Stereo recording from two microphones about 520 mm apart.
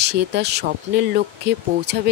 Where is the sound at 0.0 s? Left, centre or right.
Centre.